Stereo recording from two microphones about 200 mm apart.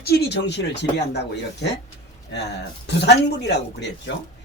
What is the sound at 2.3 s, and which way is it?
Speech, 60° left (ahead or behind).